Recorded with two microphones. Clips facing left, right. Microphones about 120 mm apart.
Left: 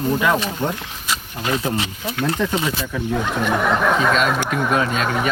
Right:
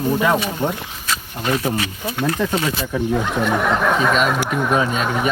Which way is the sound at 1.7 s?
20° left (ahead or behind).